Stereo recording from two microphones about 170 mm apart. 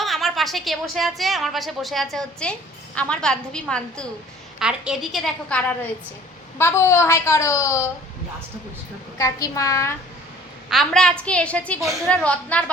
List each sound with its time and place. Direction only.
0.0 s a woman's voice: centre (ahead or behind); by 7.9 s 15° left (ahead or behind)
9.1 s a woman's voice: 20° left (ahead or behind)
10.7 s a woman's voice: centre (ahead or behind)